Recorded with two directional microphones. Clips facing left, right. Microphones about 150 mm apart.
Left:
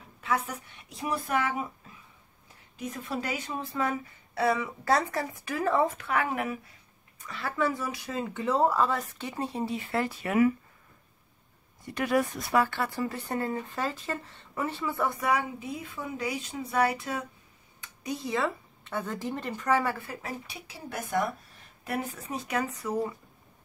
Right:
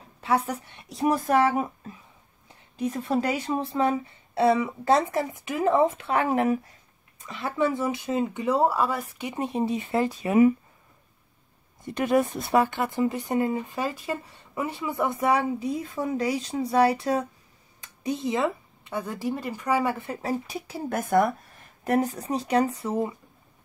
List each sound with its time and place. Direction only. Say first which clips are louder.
0.2 s speech: right 5 dB; 35° right (ahead or behind)
2.4 s a sound: right 9 dB; 30° right (ahead or behind)
3.2 s speech: right 7 dB; 35° right (ahead or behind)
7.2 s speech: right 4 dB; 20° right (ahead or behind)
11.8 s speech: right 4 dB; 25° right (ahead or behind)
20.2 s speech: right 9 dB; 40° right (ahead or behind)
21.8 s speech: right 9 dB; 40° right (ahead or behind)